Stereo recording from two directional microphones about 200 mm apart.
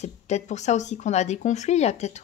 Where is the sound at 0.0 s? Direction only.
35° left (ahead or behind).